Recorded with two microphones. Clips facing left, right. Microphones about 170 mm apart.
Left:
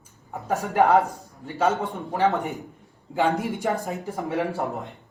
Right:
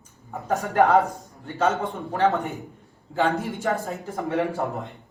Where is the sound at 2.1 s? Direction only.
10° left (ahead or behind).